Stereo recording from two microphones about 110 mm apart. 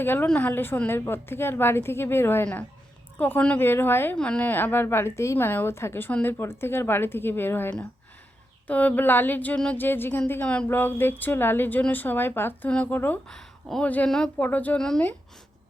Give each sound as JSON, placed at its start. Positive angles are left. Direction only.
{"t": 0.0, "sound": "a woman's voice", "side_deg": 20}
{"t": 13.2, "sound": "speech", "side_deg": 5}